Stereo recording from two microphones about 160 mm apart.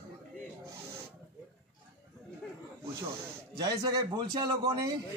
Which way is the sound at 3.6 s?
25° right (ahead or behind).